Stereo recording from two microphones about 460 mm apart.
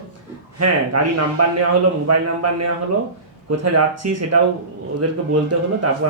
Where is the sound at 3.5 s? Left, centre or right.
Right.